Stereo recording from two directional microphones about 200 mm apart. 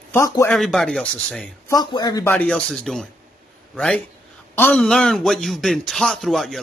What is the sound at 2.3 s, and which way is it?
A man's voice, 5° left (ahead or behind).